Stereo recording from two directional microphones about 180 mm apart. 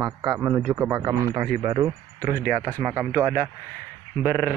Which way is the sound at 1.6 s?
25° right (ahead or behind).